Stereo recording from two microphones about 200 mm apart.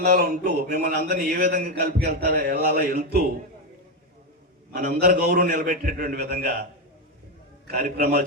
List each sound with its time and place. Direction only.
0.0 s speech: 50° right (ahead or behind)
4.7 s speech: 50° right (ahead or behind)
7.7 s speech: 45° right (ahead or behind)